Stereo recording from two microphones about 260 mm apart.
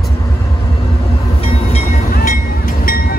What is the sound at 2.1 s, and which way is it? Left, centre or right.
Vehicle, left.